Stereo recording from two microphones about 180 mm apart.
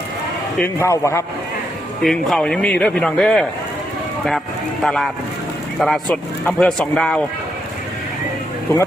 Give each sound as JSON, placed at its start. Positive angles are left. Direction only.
{"t": 0.6, "sound": "a man's voice", "side_deg": 15}
{"t": 2.0, "sound": "a man's voice", "side_deg": 0}
{"t": 4.8, "sound": "a man's voice", "side_deg": 0}